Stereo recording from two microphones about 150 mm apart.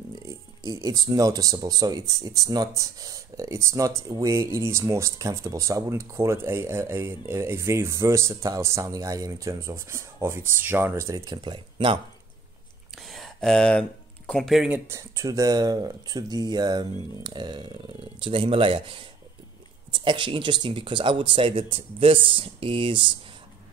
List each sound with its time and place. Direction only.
0.3 s speech: 20° right (ahead or behind)
11.4 s speech: 35° right (ahead or behind)
12.9 s a sound: centre (ahead or behind)
14.9 s speech: 20° right (ahead or behind)